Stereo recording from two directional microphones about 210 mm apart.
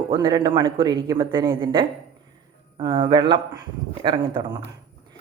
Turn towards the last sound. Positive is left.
turn(degrees=-20)  # may be behind; listen again after turning